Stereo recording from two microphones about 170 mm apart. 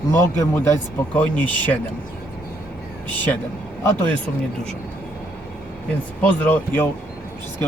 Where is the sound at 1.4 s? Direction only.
25° right (ahead or behind).